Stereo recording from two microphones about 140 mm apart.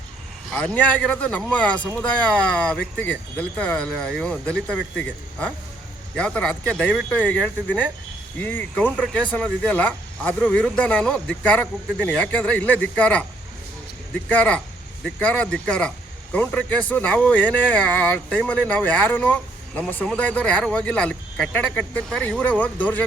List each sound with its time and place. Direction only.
0.5 s speech: 10° left (ahead or behind)